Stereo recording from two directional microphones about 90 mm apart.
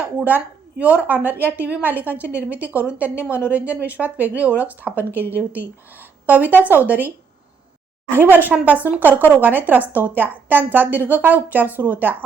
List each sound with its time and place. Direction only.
0.0 s a woman's voice: 20° right (ahead or behind)
8.1 s a woman's voice: 25° right (ahead or behind)